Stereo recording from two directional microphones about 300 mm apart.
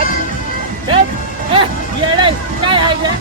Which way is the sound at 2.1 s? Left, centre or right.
Centre.